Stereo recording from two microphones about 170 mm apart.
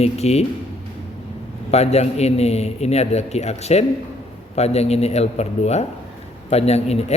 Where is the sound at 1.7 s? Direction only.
40° left (ahead or behind).